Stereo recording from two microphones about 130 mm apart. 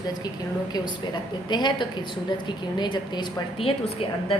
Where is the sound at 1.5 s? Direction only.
35° left (ahead or behind).